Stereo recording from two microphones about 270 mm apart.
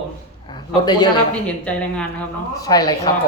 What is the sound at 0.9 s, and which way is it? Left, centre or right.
Speech, centre.